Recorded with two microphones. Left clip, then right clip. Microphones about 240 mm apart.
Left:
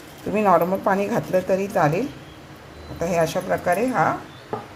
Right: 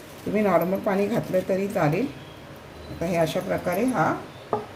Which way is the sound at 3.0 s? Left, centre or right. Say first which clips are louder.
Left 3 dB; left.